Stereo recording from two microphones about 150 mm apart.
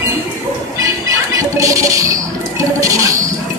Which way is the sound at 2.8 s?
20° right (ahead or behind).